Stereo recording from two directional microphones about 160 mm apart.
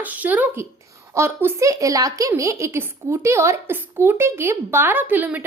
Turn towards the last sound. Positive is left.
turn(degrees=-10)  # may be behind; listen again after turning